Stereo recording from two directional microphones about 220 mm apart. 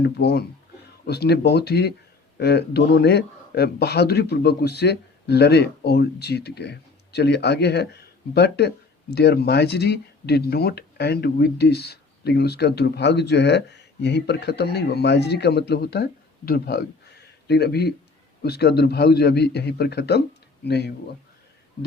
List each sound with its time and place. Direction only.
0.0 s speech: 45° left (ahead or behind)